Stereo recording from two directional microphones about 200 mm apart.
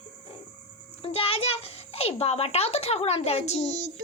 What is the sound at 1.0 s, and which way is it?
A child's voice, 30° left (ahead or behind).